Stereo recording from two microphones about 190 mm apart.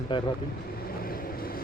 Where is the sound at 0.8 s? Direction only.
50° left (ahead or behind).